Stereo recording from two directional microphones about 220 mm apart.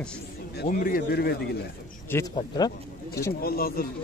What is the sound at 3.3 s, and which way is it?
Speech, 45° left (ahead or behind).